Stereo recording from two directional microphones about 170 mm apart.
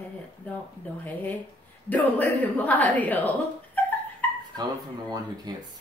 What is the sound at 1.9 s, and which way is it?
A woman's voice, 10° left (ahead or behind).